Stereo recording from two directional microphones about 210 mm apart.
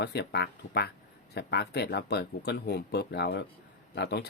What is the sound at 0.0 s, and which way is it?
Speech, 50° left (ahead or behind).